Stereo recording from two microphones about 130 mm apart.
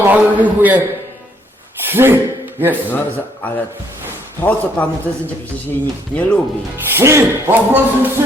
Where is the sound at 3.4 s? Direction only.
15° left (ahead or behind).